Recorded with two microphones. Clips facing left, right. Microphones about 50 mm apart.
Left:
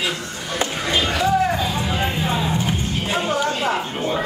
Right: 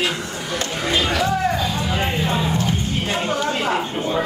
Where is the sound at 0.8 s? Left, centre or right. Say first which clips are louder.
Right 1 dB; centre.